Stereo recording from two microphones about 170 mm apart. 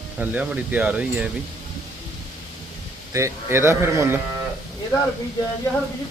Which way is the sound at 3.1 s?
15° right (ahead or behind).